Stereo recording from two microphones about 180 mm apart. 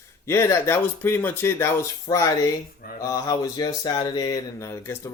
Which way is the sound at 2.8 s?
55° left (ahead or behind).